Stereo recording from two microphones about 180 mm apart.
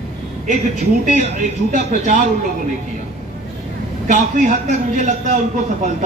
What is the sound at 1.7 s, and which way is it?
Speech, 45° right (ahead or behind).